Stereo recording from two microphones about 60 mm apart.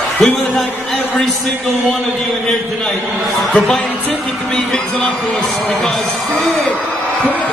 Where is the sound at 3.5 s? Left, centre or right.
Centre.